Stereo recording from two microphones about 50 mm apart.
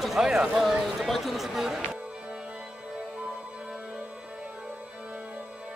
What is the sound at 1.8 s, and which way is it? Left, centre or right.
Music, right.